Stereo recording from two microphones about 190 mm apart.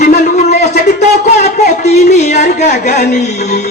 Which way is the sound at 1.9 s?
35° left (ahead or behind).